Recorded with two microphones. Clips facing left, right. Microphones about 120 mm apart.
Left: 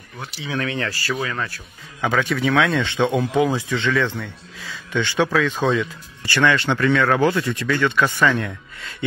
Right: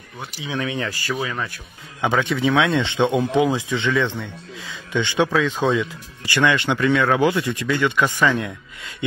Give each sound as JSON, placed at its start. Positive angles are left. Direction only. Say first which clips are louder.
{"t": 0.4, "sound": "a man's voice", "louder": "even", "side_deg": -15}